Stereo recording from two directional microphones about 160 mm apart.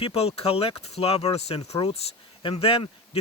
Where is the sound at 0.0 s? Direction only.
40° left (ahead or behind).